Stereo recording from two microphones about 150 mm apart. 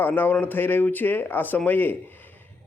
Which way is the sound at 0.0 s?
10° left (ahead or behind).